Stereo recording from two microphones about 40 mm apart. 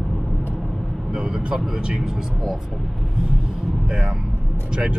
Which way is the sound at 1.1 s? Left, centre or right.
Right.